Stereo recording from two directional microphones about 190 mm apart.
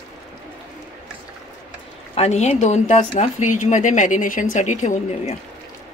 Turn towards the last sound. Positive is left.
turn(degrees=40)  # may be behind; listen again after turning